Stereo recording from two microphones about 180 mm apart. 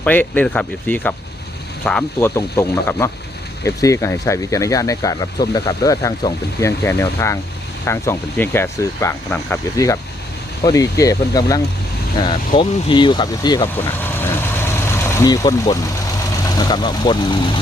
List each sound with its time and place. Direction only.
0.0 s speech: 10° left (ahead or behind)
2.3 s speech: 15° left (ahead or behind)
14.0 s vehicle: 10° left (ahead or behind)
16.6 s speech: 25° left (ahead or behind)